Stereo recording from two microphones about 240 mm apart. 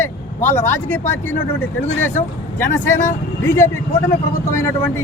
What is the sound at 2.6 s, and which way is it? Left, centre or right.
Speech, centre.